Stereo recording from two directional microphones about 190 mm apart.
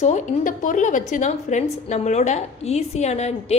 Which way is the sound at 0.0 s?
40° left (ahead or behind).